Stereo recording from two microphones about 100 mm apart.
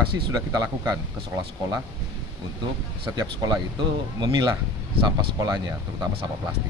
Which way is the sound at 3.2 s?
40° right (ahead or behind).